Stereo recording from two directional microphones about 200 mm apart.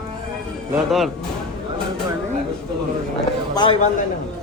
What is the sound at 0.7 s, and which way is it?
Speech, centre (ahead or behind).